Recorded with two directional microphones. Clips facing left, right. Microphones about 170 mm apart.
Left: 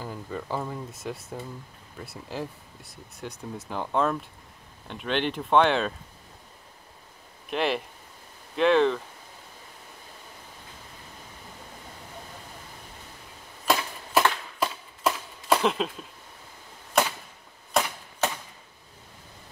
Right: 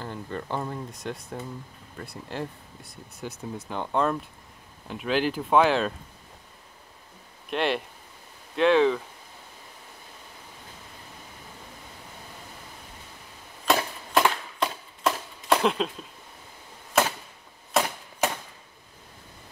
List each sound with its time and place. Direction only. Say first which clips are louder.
0.0 s speech: right 1 dB; 5° left (ahead or behind)
7.4 s speech: even; centre (ahead or behind)
13.7 s a sound: right 1 dB; 5° left (ahead or behind)
17.0 s arrow: right 1 dB; 5° right (ahead or behind)